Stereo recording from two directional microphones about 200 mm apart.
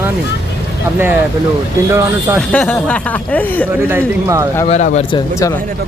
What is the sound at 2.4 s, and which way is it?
Speech, 5° left (ahead or behind).